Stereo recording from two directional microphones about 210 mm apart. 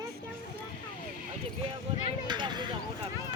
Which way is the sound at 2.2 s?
20° right (ahead or behind).